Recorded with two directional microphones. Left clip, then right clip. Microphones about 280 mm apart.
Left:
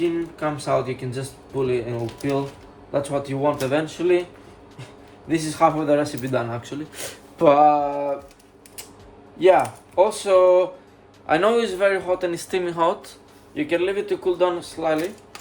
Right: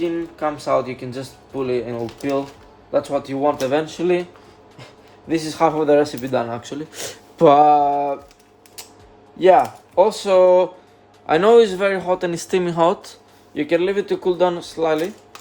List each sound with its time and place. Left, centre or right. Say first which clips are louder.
0.6 s speech: right 2 dB; right
5.3 s a man's voice: right 1 dB; right
9.4 s a man's voice: right 3 dB; right